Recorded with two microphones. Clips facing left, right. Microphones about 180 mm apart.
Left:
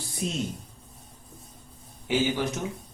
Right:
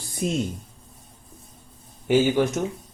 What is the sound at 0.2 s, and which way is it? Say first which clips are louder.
Speech: right 6 dB; 50° right (ahead or behind).